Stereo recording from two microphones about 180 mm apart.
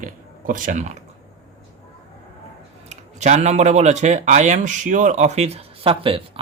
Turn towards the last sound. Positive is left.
turn(degrees=-30)  # may be behind; listen again after turning